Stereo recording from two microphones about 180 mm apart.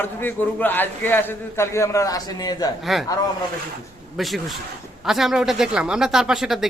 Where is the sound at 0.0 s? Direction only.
10° left (ahead or behind).